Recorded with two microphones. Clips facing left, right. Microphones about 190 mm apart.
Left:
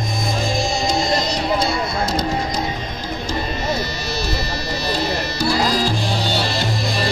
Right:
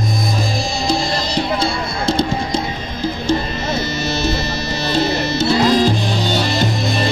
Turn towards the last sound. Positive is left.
turn(degrees=-20)  # may be behind; listen again after turning